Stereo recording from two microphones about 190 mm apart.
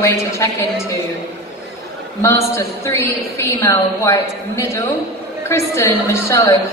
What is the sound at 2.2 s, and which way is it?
A woman's voice, 15° left (ahead or behind).